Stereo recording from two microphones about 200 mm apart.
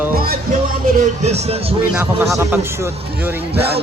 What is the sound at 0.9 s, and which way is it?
Speech, 35° right (ahead or behind).